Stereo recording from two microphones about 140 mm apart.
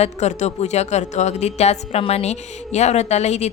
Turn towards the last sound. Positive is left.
turn(degrees=50)  # may be behind; listen again after turning